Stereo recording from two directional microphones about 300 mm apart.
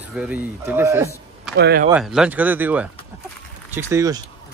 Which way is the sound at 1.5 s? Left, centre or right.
Right.